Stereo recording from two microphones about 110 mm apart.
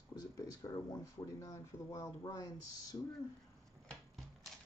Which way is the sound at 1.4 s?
30° left (ahead or behind).